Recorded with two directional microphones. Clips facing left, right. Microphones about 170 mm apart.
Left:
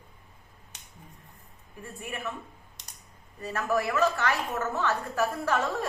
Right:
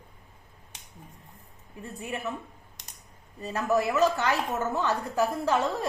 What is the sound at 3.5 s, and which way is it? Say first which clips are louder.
A woman's voice: right 2 dB; 20° right (ahead or behind).